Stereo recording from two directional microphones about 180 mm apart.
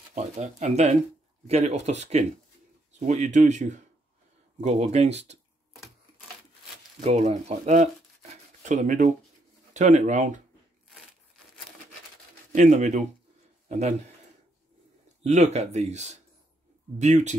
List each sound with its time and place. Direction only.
0.1 s speech: 40° right (ahead or behind)
7.1 s speech: 40° right (ahead or behind)
12.5 s speech: 40° right (ahead or behind)
15.2 s speech: 40° right (ahead or behind)